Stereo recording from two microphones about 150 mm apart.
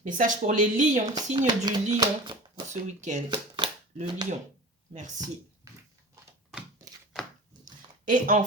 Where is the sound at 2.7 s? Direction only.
50° right (ahead or behind).